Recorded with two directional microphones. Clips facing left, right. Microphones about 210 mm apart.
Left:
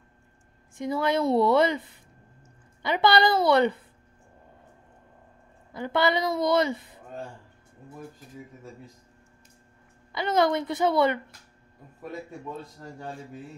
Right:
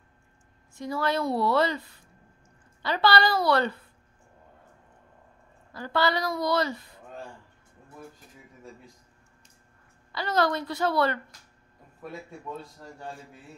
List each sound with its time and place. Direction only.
0.7 s a woman's voice: 20° left (ahead or behind)
5.7 s a woman's voice: 20° left (ahead or behind)
10.1 s a woman's voice: 20° left (ahead or behind)